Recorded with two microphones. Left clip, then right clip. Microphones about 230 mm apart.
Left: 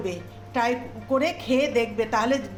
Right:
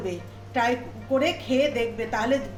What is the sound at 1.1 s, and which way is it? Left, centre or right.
A woman's voice, left.